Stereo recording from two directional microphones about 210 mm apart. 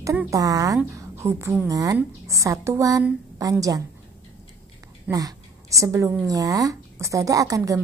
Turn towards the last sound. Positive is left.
turn(degrees=-15)  # may be behind; listen again after turning